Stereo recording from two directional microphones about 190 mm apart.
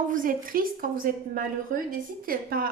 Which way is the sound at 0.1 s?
45° right (ahead or behind).